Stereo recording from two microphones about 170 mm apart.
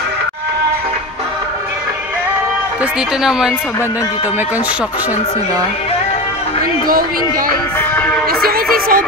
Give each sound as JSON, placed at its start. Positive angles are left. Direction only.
{"t": 2.8, "sound": "speech", "side_deg": -5}
{"t": 6.9, "sound": "music", "side_deg": -60}
{"t": 7.9, "sound": "music", "side_deg": 10}
{"t": 8.3, "sound": "music", "side_deg": -65}